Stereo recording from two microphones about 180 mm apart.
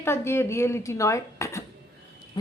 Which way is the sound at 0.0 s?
15° left (ahead or behind).